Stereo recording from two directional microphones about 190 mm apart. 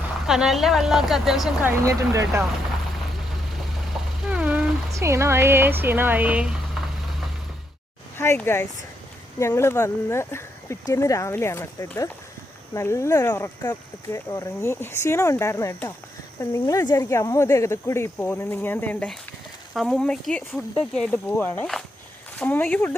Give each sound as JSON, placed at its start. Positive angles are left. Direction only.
{"t": 0.3, "sound": "speech", "side_deg": 0}
{"t": 1.8, "sound": "speech", "side_deg": -15}
{"t": 4.2, "sound": "speech", "side_deg": -5}
{"t": 8.2, "sound": "speech", "side_deg": 15}